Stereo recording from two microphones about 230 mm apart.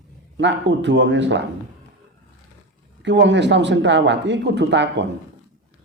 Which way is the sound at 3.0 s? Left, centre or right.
Right.